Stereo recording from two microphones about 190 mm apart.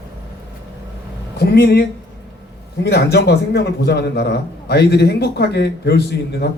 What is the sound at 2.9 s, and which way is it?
A man's voice, 60° left (ahead or behind).